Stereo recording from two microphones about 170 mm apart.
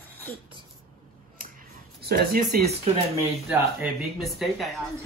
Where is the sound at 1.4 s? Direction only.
60° right (ahead or behind).